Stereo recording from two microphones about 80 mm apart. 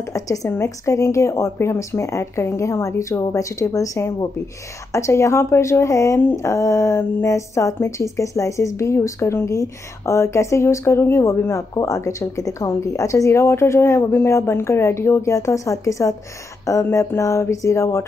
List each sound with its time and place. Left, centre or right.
0.0 s a woman's voice: left